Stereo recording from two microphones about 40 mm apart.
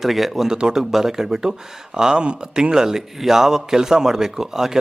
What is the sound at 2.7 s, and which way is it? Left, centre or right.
Speech, centre.